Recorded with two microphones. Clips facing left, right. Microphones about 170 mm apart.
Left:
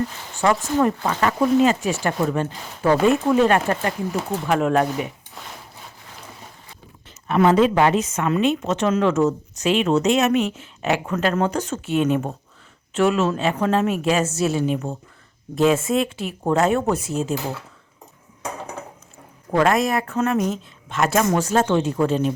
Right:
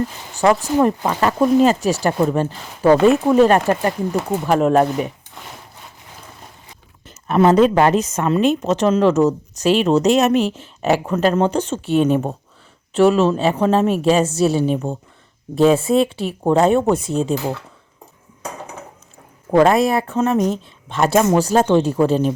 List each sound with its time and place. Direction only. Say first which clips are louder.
0.3 s a woman's voice: right 4 dB; 35° right (ahead or behind)
7.3 s a woman's voice: right 3 dB; 40° right (ahead or behind)
19.5 s a woman's voice: right 5 dB; 30° right (ahead or behind)